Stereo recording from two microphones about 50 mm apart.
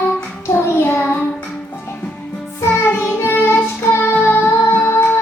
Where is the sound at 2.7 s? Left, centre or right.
Left.